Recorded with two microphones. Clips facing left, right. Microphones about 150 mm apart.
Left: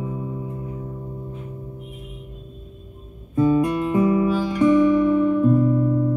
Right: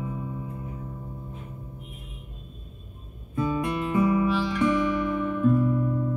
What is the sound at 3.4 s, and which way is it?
Music, 30° left (ahead or behind).